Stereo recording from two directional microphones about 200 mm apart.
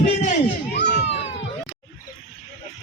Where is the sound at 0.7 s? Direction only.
60° left (ahead or behind).